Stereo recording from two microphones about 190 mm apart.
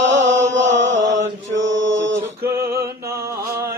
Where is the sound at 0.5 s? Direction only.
75° right (ahead or behind).